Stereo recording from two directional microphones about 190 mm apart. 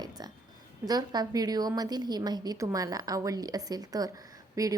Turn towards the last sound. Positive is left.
turn(degrees=-15)  # may be behind; listen again after turning